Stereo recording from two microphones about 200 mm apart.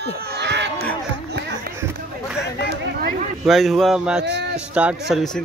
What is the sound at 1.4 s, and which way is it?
Run, 55° right (ahead or behind).